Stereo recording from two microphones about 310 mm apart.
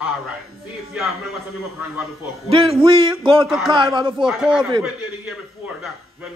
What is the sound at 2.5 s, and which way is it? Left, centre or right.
Speech, centre.